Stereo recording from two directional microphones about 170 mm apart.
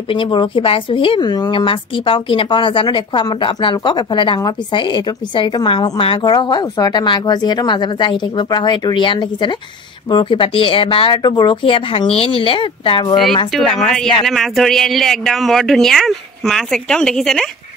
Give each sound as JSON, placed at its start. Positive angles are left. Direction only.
{"t": 0.1, "sound": "speech", "side_deg": 30}
{"t": 13.1, "sound": "a man's voice", "side_deg": 0}